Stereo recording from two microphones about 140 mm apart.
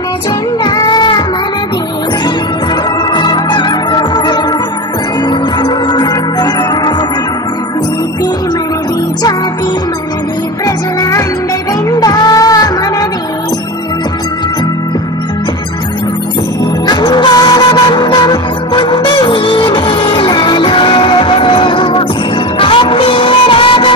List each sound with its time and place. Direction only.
0.7 s music: 30° left (ahead or behind)
3.2 s organ: 35° left (ahead or behind)
5.6 s music: 30° left (ahead or behind)
11.0 s music: 20° left (ahead or behind)
16.8 s music: 30° left (ahead or behind)